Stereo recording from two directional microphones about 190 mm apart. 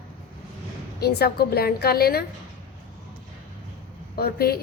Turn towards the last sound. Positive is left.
turn(degrees=55)  # may be behind; listen again after turning